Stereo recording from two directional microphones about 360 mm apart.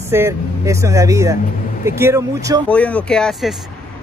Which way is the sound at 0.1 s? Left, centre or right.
Centre.